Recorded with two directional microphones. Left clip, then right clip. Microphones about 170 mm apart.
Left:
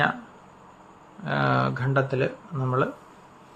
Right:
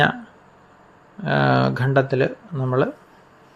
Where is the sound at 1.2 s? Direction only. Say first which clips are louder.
Right 5 dB; 30° right (ahead or behind).